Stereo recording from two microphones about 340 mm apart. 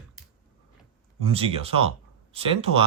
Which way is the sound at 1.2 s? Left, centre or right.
Centre.